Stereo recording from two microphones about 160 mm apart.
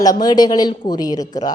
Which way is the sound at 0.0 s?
25° left (ahead or behind).